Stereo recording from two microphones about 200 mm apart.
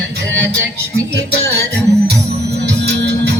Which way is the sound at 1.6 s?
55° right (ahead or behind).